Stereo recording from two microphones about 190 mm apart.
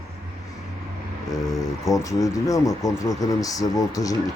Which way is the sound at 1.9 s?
15° left (ahead or behind).